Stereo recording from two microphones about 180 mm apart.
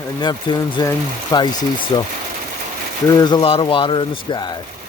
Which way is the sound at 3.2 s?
20° left (ahead or behind).